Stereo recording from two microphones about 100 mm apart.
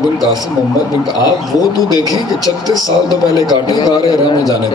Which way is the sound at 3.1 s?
40° left (ahead or behind).